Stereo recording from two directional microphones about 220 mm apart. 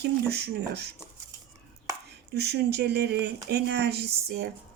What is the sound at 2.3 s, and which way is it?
Speech, 50° right (ahead or behind).